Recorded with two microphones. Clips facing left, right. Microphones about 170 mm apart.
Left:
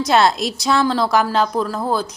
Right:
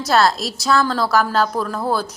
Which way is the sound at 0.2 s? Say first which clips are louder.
Left 1 dB; centre (ahead or behind).